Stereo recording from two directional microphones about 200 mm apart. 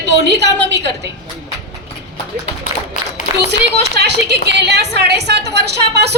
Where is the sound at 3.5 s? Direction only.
55° right (ahead or behind).